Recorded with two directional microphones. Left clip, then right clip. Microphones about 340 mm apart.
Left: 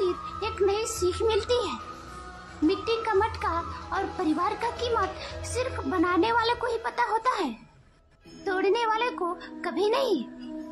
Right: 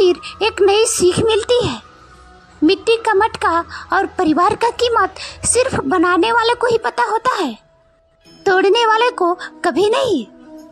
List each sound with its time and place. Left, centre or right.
0.0 s a woman's voice: right